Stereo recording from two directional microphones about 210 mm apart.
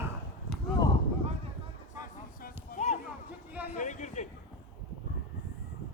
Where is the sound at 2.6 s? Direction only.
35° left (ahead or behind).